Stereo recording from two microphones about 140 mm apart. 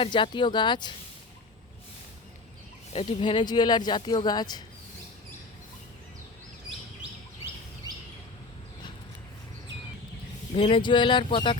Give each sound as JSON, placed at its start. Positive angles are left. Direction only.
{"t": 0.0, "sound": "speech", "side_deg": 35}
{"t": 2.9, "sound": "speech", "side_deg": 40}
{"t": 10.5, "sound": "speech", "side_deg": 40}